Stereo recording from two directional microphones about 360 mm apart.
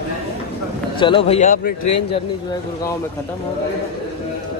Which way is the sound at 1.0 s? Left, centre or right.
Centre.